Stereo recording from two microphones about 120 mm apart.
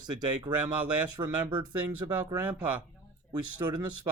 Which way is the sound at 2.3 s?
10° right (ahead or behind).